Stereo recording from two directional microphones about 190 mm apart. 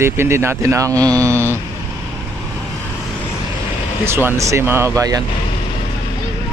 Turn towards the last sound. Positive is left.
turn(degrees=-20)  # may be behind; listen again after turning